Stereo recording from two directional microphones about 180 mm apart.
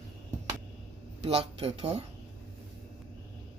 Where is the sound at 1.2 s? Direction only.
35° right (ahead or behind).